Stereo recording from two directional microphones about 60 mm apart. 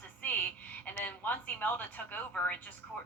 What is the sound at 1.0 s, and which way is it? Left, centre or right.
A woman's voice, left.